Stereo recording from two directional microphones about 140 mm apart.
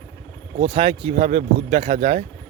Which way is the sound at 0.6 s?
45° right (ahead or behind).